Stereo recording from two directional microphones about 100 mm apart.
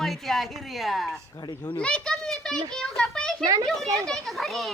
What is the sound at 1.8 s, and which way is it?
A child's voice, 10° left (ahead or behind).